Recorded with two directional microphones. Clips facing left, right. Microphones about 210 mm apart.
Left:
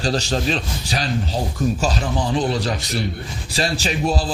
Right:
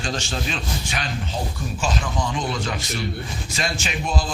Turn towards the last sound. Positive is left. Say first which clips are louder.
# left 5 dB
turn(degrees=35)  # may be behind; listen again after turning